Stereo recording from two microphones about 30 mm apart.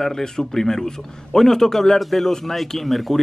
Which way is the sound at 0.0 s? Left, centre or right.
Centre.